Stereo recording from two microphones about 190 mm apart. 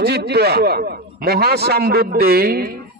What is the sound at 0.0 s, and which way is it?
A man's voice, 60° right (ahead or behind).